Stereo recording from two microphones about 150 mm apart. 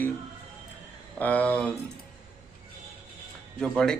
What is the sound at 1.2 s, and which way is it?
Speech, 10° left (ahead or behind).